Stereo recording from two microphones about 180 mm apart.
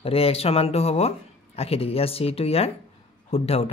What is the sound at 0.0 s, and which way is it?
Speech, 30° left (ahead or behind).